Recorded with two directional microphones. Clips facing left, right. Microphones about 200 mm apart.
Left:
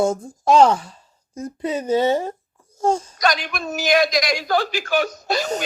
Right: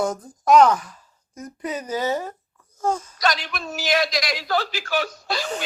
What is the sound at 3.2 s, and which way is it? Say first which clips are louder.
Speech: left 3 dB; 50° left (ahead or behind).